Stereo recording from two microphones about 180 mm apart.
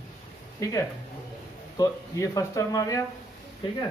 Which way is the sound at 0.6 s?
20° left (ahead or behind).